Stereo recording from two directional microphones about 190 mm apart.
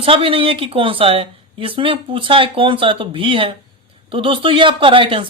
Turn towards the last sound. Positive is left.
turn(degrees=-25)  # may be behind; listen again after turning